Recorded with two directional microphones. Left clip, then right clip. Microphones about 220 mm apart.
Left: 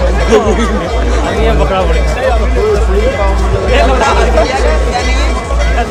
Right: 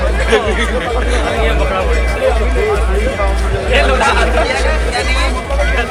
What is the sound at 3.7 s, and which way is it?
Speech, 45° left (ahead or behind).